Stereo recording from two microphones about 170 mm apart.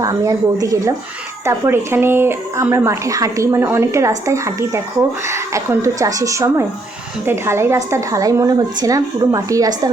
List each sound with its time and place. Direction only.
0.0 s a woman's voice: 20° right (ahead or behind)